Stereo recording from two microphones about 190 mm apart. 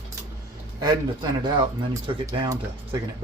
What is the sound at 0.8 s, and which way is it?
Speech, 25° right (ahead or behind).